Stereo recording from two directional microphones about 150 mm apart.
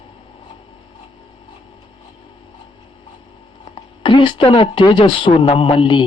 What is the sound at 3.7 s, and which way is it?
Speech, 35° left (ahead or behind).